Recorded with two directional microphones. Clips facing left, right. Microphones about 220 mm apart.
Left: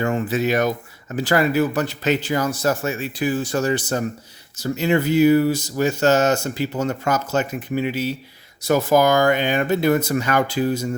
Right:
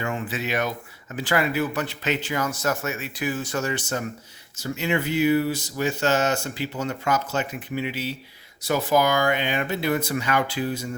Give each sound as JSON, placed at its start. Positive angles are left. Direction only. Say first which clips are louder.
{"t": 0.0, "sound": "speech", "louder": "left 8 dB", "side_deg": 40}